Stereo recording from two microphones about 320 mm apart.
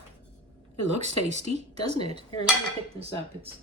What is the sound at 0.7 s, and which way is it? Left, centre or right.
Speech, left.